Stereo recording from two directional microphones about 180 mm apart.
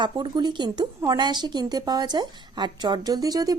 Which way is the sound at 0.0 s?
25° right (ahead or behind).